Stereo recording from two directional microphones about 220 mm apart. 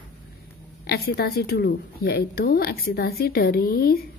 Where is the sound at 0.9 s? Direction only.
45° left (ahead or behind).